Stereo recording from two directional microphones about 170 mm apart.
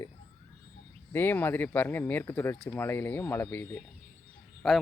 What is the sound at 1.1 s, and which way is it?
Speech, 10° left (ahead or behind).